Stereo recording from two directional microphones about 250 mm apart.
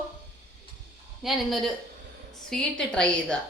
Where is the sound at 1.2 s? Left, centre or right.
Centre.